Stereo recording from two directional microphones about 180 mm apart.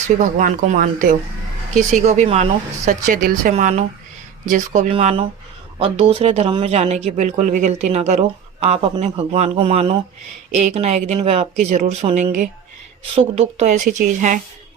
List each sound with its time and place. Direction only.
0.2 s a woman's voice: 45° right (ahead or behind)